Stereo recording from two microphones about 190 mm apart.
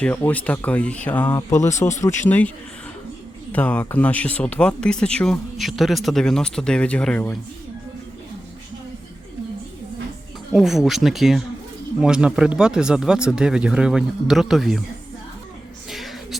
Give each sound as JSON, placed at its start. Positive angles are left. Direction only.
{"t": 0.0, "sound": "speech", "side_deg": 10}
{"t": 1.3, "sound": "speech", "side_deg": 20}
{"t": 1.5, "sound": "speech", "side_deg": 40}
{"t": 2.0, "sound": "speech", "side_deg": 10}
{"t": 3.5, "sound": "speech", "side_deg": 10}
{"t": 10.5, "sound": "speech", "side_deg": 0}
{"t": 15.9, "sound": "a sound", "side_deg": 0}